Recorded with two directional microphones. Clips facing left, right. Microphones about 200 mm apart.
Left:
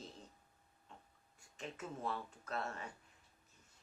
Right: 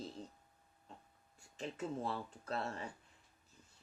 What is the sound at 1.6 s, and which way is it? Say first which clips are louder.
Speech: right 5 dB; 30° right (ahead or behind).